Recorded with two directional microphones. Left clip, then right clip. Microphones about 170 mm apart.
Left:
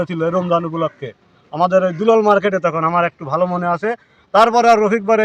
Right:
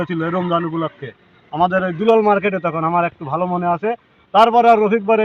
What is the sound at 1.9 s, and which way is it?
Speech, 50° left (ahead or behind).